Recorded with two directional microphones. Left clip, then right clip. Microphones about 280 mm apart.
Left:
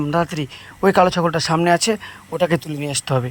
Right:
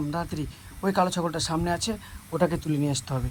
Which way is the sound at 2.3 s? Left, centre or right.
Centre.